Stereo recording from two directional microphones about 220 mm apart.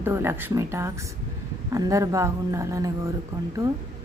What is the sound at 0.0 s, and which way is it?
Speech, 10° right (ahead or behind).